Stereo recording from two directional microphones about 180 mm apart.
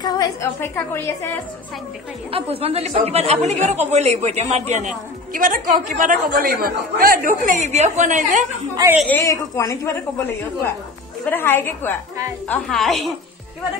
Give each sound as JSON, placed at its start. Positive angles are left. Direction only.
{"t": 0.0, "sound": "a woman's voice", "side_deg": 15}
{"t": 2.3, "sound": "speech", "side_deg": -30}
{"t": 8.8, "sound": "a woman's voice", "side_deg": -20}
{"t": 9.1, "sound": "a woman's voice", "side_deg": 15}
{"t": 11.2, "sound": "a woman's voice", "side_deg": 10}